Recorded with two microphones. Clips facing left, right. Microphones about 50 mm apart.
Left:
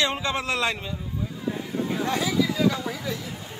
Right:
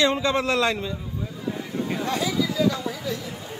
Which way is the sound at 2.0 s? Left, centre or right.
Left.